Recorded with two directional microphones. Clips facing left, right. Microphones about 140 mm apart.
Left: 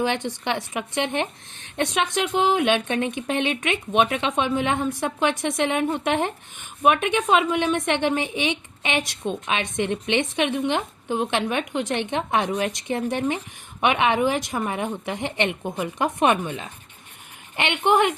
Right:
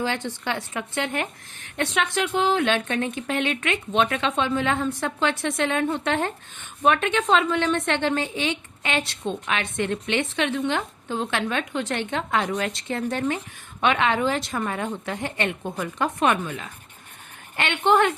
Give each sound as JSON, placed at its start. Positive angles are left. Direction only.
{"t": 0.0, "sound": "a woman's voice", "side_deg": 15}